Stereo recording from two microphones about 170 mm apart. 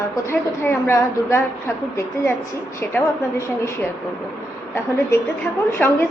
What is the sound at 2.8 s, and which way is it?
A woman's voice, 15° left (ahead or behind).